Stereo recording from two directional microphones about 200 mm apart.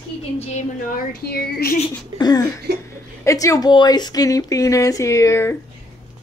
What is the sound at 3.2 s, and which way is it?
Speech, 15° left (ahead or behind).